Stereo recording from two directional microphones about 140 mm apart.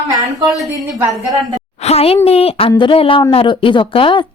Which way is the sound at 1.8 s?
45° left (ahead or behind).